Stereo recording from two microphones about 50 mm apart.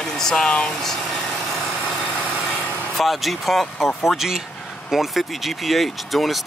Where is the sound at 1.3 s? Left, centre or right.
Centre.